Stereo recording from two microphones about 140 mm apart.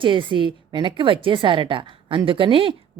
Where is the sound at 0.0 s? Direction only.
35° right (ahead or behind).